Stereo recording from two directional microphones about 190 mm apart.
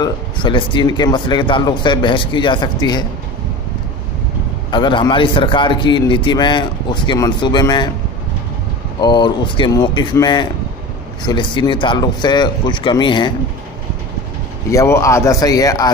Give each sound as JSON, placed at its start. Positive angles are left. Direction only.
{"t": 0.0, "sound": "a man's voice", "side_deg": 25}
{"t": 4.6, "sound": "a man's voice", "side_deg": 25}
{"t": 9.0, "sound": "a man's voice", "side_deg": 25}
{"t": 14.7, "sound": "speech", "side_deg": 15}